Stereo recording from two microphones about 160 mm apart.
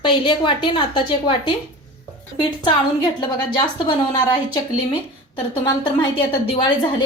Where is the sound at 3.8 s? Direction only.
25° left (ahead or behind).